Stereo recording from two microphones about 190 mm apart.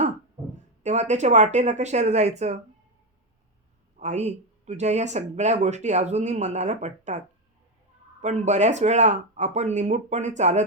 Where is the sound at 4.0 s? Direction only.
35° right (ahead or behind).